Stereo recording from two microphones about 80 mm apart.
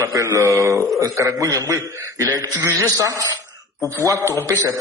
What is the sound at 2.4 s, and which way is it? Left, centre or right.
A man's voice, right.